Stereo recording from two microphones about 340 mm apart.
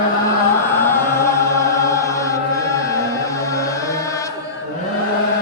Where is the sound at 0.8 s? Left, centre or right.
Centre.